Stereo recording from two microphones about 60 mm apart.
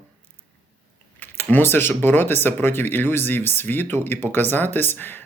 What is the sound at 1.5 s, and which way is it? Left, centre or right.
Speech, left.